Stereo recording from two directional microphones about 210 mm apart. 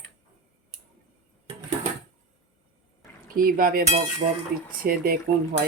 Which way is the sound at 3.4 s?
45° right (ahead or behind).